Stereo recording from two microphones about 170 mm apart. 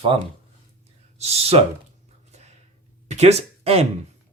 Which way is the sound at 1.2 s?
40° right (ahead or behind).